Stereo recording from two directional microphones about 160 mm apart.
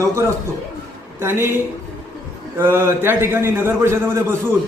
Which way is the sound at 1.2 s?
15° right (ahead or behind).